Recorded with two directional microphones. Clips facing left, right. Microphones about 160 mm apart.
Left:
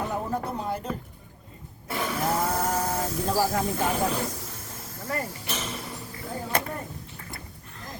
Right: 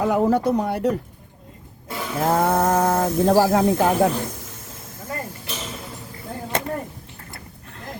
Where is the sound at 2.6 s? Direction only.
55° right (ahead or behind); by 3.9 s 70° right (ahead or behind).